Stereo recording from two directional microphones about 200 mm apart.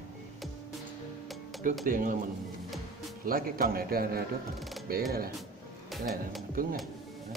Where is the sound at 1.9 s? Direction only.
45° right (ahead or behind).